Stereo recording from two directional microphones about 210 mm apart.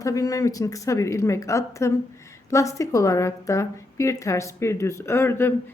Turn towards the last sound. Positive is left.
turn(degrees=10)  # may be behind; listen again after turning